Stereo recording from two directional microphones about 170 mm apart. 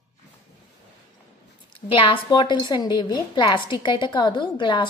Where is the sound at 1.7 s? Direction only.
30° left (ahead or behind).